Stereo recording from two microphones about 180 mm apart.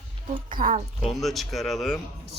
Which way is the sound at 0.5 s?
50° right (ahead or behind).